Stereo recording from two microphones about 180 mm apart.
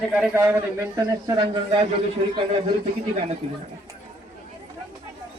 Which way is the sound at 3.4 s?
30° right (ahead or behind).